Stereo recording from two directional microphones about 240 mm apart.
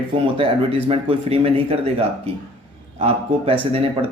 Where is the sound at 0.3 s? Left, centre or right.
Right.